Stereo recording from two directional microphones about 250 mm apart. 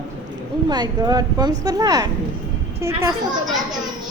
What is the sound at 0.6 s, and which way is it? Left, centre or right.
Speech, centre.